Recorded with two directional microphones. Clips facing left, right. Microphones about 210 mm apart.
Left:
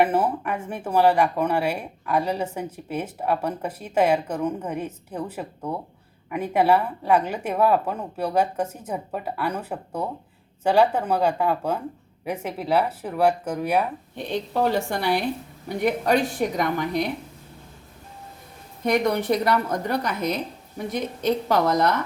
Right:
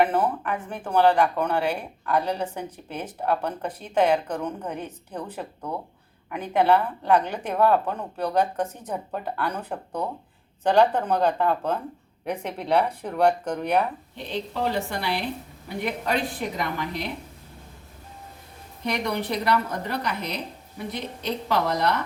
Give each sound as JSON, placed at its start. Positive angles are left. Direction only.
{"t": 0.0, "sound": "speech", "side_deg": 5}
{"t": 14.3, "sound": "a woman's voice", "side_deg": 45}
{"t": 18.9, "sound": "a woman's voice", "side_deg": 45}